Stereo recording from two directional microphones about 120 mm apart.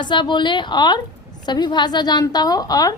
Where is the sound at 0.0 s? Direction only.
40° left (ahead or behind).